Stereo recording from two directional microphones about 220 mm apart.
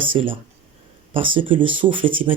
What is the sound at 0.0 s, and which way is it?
Speech, 25° right (ahead or behind).